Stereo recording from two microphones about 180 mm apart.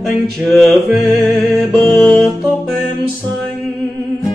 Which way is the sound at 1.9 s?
5° left (ahead or behind).